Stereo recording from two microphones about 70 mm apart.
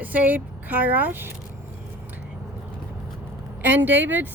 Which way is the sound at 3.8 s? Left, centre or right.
Right.